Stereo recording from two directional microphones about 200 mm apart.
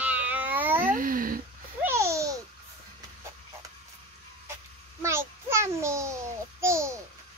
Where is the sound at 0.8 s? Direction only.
45° right (ahead or behind).